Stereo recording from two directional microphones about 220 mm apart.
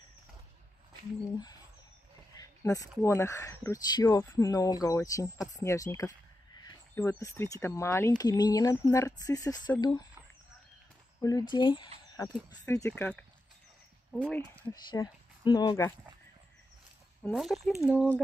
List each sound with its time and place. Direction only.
2.3 s speech: 15° left (ahead or behind)
11.1 s speech: 15° left (ahead or behind)
14.9 s speech: 20° left (ahead or behind)
17.2 s speech: centre (ahead or behind)